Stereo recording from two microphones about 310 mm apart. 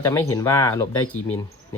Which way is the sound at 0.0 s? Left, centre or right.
Centre.